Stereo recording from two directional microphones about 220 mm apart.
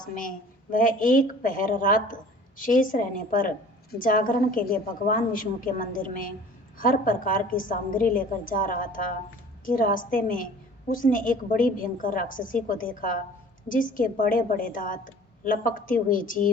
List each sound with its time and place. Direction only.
0.2 s a woman's voice: 35° left (ahead or behind)